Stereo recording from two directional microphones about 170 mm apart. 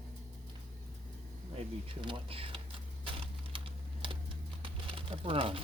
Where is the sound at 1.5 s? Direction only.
30° right (ahead or behind).